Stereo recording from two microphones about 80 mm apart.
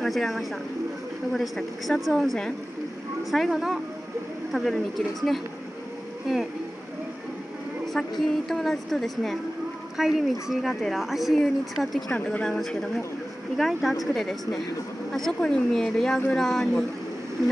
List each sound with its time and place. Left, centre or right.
0.0 s a woman's voice: centre
7.8 s a woman's voice: centre
12.1 s speech: centre
12.4 s a woman's voice: centre